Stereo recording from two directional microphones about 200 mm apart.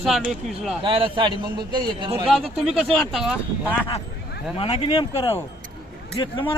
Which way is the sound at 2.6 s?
Centre (ahead or behind).